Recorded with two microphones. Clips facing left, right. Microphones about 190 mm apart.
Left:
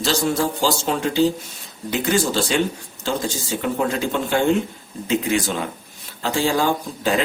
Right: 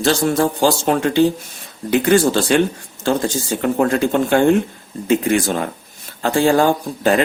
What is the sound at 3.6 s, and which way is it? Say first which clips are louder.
A man's voice: right 6 dB; 55° right (ahead or behind).